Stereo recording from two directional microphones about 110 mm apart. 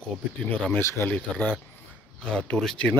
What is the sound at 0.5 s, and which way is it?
Speech, 10° left (ahead or behind).